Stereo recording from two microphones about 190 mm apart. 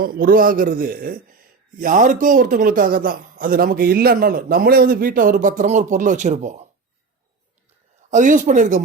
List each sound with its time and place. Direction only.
0.0 s a man's voice: 50° right (ahead or behind)
8.1 s a man's voice: 40° right (ahead or behind)